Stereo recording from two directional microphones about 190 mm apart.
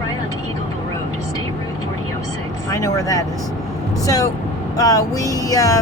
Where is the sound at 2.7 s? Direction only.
15° left (ahead or behind).